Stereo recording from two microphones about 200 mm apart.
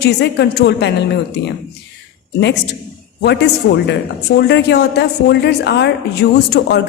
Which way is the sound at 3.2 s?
60° left (ahead or behind).